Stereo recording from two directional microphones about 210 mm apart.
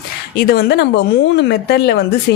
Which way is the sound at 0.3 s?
50° left (ahead or behind).